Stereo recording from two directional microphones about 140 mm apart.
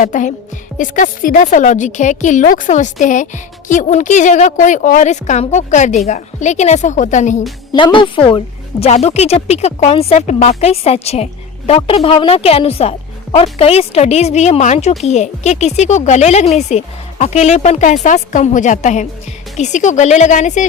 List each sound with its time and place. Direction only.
0.0 s speech: 65° left (ahead or behind)
7.7 s a woman's voice: 30° left (ahead or behind)
8.8 s speech: 50° left (ahead or behind)